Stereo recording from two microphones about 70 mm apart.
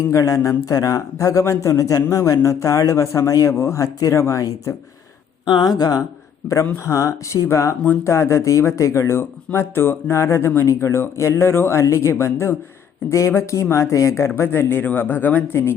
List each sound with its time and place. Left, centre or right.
0.1 s speech: left
5.5 s speech: left
6.7 s speech: left